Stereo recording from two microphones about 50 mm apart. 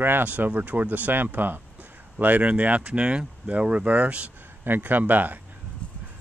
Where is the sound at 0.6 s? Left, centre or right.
Right.